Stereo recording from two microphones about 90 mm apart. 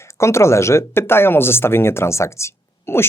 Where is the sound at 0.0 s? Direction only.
30° left (ahead or behind).